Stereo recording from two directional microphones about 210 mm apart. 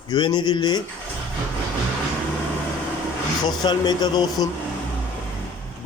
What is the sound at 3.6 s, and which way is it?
Speech, 20° left (ahead or behind).